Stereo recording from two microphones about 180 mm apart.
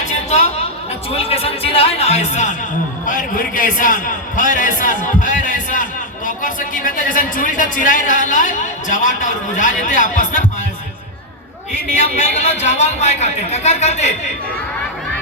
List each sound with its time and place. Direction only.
1.1 s a man's voice: 35° left (ahead or behind)
3.1 s a man's voice: 50° left (ahead or behind)
11.7 s a man's voice: 40° left (ahead or behind)